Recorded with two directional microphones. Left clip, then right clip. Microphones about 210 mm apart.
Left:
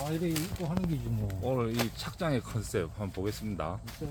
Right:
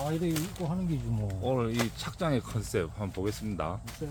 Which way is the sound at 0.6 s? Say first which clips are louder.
Right 2 dB; 15° left (ahead or behind).